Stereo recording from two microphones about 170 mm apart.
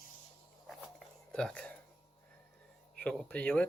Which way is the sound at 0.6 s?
5° left (ahead or behind).